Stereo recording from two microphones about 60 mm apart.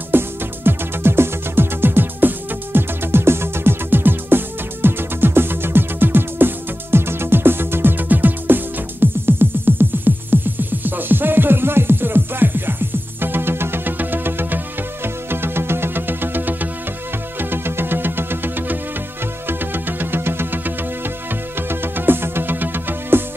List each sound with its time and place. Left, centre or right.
0.1 s music: right